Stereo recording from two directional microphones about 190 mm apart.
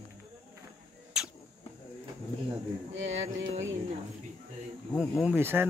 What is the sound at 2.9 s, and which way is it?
Music, 80° right.